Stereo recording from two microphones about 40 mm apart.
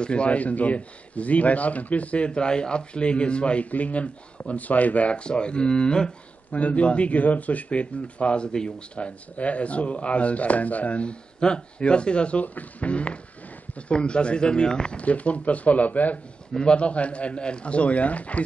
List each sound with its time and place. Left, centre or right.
0.0 s speech: left
6.5 s speech: left
15.0 s speech: left
16.5 s speech: left